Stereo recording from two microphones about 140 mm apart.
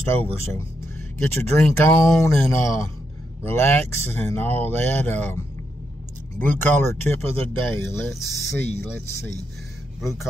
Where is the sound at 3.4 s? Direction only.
15° left (ahead or behind).